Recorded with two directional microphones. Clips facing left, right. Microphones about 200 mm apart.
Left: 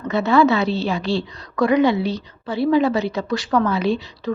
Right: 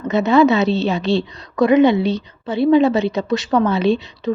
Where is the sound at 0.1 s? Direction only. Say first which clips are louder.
Right 3 dB; 20° right (ahead or behind).